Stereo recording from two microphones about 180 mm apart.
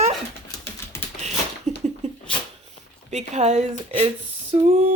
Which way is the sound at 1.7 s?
40° right (ahead or behind).